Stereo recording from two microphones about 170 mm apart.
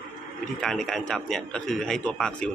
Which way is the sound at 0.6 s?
Centre (ahead or behind).